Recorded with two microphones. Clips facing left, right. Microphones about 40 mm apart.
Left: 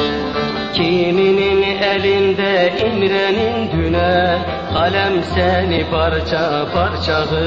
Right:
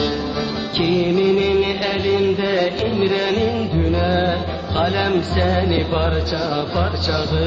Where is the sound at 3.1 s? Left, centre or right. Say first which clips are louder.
Left 3 dB; left.